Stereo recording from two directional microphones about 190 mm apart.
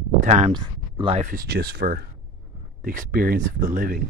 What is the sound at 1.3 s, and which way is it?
Speech, 50° right (ahead or behind).